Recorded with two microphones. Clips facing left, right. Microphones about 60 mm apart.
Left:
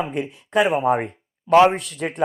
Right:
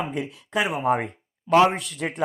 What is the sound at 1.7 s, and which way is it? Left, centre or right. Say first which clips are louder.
Speech: left 2 dB; left.